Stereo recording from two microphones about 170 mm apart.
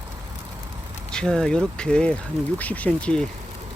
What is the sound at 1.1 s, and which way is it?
Speech, 5° left (ahead or behind).